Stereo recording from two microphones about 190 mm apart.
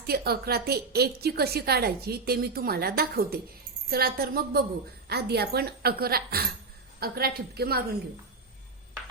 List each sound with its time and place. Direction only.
0.1 s a woman's voice: 55° right (ahead or behind)